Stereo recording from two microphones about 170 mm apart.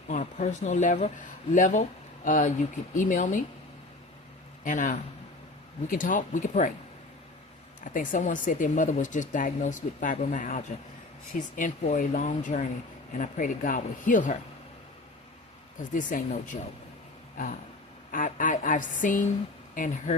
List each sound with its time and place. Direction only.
0.1 s speech: 45° left (ahead or behind)
4.6 s speech: 50° left (ahead or behind)
7.9 s speech: 50° left (ahead or behind)
15.8 s speech: 50° left (ahead or behind)
18.1 s speech: 50° left (ahead or behind)